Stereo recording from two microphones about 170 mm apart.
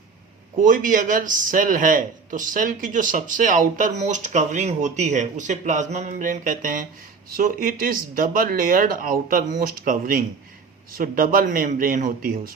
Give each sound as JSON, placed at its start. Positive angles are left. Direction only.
{"t": 0.6, "sound": "a man's voice", "side_deg": -50}